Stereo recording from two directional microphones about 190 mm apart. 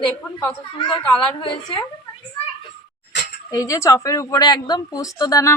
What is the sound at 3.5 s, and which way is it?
A woman's voice, 15° left (ahead or behind).